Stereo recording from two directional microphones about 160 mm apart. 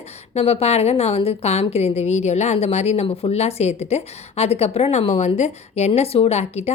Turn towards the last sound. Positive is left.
turn(degrees=40)  # may be behind; listen again after turning